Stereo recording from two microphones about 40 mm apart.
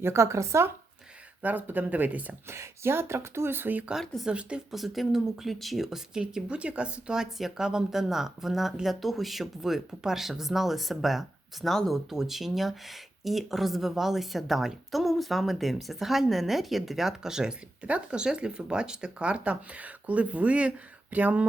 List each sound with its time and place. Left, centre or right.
1.4 s speech: right
2.5 s speech: right
4.3 s speech: right
4.7 s speech: centre
6.5 s speech: right
7.2 s speech: centre
17.8 s speech: right